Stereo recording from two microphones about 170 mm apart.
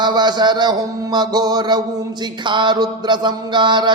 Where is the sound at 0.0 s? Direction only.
25° right (ahead or behind).